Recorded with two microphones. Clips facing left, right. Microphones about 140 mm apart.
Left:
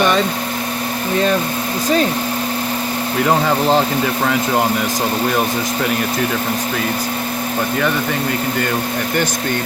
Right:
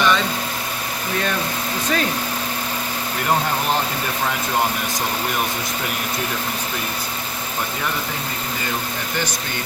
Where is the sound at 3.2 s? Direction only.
90° left.